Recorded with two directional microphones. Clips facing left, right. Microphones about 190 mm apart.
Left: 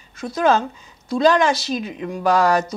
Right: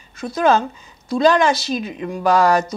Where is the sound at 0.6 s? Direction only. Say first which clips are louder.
Right 1 dB; 20° right (ahead or behind).